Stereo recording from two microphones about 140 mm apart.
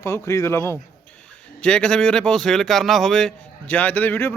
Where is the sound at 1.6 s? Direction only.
5° left (ahead or behind).